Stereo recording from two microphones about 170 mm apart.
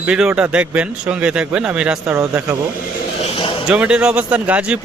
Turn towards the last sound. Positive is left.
turn(degrees=-5)  # may be behind; listen again after turning